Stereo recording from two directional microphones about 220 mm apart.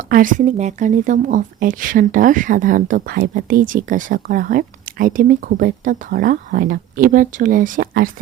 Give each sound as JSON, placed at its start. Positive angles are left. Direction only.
{"t": 0.1, "sound": "speech", "side_deg": -35}